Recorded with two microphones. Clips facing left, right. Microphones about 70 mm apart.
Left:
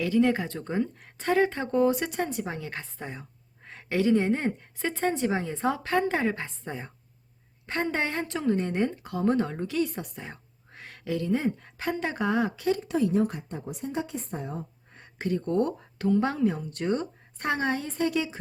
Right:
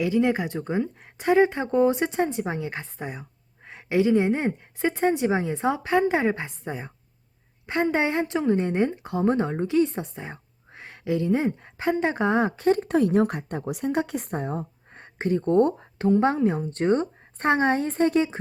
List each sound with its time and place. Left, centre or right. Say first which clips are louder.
0.0 s a woman's voice: right 1 dB; centre; by 14.7 s right
14.9 s speech: right 4 dB; right